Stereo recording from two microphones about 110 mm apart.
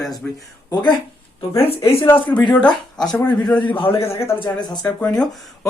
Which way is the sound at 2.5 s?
10° left (ahead or behind).